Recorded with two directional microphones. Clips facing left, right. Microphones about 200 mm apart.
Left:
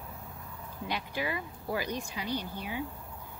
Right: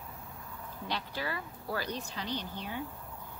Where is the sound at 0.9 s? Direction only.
15° left (ahead or behind).